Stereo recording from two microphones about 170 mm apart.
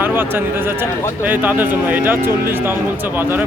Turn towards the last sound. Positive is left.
turn(degrees=-10)  # may be behind; listen again after turning